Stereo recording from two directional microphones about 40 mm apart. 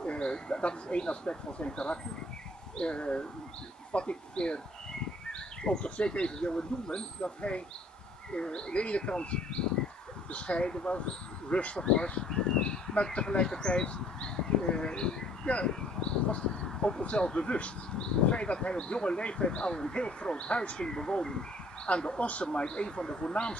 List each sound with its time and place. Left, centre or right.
0.0 s speech: left
16.6 s a sound: centre
17.0 s speech: left